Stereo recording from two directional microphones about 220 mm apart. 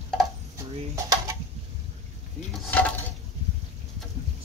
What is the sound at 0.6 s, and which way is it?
Dishes, 15° right (ahead or behind).